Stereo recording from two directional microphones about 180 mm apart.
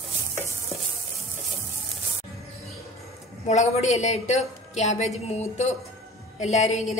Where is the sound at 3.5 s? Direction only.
40° left (ahead or behind).